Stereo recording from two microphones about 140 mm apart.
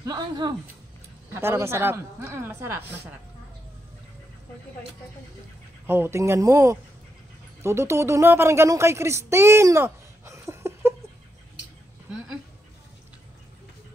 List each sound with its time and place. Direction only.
0.0 s speech: 30° right (ahead or behind)
1.3 s speech: 20° right (ahead or behind)
5.9 s speech: 15° right (ahead or behind)